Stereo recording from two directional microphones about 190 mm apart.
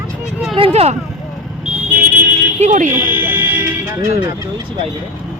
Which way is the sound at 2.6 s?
40° right (ahead or behind).